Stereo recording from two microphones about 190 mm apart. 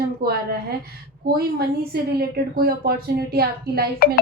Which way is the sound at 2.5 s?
55° right (ahead or behind).